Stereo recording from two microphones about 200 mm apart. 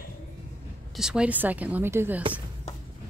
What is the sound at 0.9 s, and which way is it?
Speech, 5° right (ahead or behind).